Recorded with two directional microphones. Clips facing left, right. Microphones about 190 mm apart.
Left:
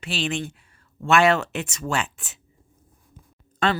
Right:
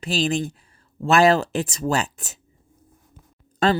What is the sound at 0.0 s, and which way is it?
Speech, 35° right (ahead or behind).